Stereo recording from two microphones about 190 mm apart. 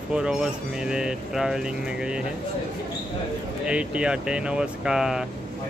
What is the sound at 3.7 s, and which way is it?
Speech, 5° right (ahead or behind).